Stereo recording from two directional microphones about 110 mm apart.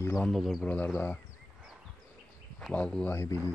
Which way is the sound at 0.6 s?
15° left (ahead or behind).